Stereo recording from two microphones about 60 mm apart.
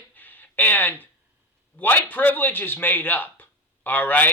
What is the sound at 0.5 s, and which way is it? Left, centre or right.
Speech, left.